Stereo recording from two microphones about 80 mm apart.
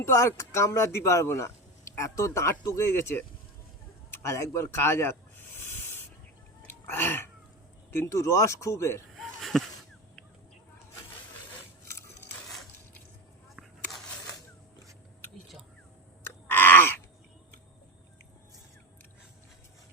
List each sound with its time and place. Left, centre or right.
0.0 s speech: left
4.1 s snake: left
6.7 s a sound: left
7.9 s speech: left
9.1 s a sound: centre
16.5 s groan: left